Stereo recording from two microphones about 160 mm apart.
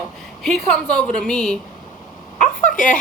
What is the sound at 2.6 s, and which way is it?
Speech, 55° left (ahead or behind).